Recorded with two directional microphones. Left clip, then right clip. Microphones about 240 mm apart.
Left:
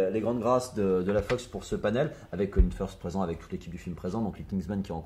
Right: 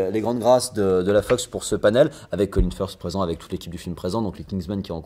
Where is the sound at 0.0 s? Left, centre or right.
Right.